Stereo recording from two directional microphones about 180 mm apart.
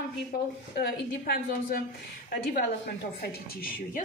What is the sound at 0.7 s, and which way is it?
Speech, 60° left (ahead or behind).